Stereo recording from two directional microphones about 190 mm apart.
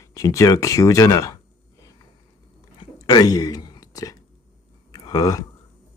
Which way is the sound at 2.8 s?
20° left (ahead or behind).